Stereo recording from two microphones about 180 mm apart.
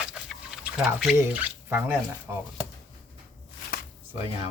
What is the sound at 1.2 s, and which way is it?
Speech, 10° right (ahead or behind).